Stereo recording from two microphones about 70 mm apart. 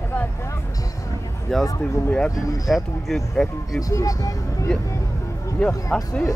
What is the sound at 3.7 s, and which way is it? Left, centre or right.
Speech, left.